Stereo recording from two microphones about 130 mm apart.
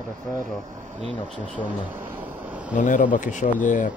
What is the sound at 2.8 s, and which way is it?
Speech, 90° left.